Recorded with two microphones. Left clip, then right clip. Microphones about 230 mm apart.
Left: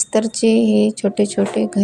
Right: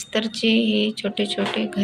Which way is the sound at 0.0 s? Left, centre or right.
Left.